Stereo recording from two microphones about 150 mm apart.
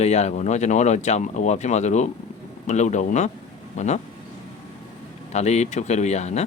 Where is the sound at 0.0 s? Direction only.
45° left (ahead or behind).